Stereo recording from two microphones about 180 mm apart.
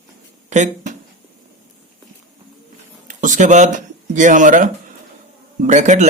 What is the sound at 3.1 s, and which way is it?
Speech, 45° right (ahead or behind).